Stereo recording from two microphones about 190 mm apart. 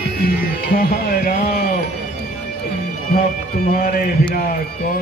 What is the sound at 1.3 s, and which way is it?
Speech, 50° left (ahead or behind).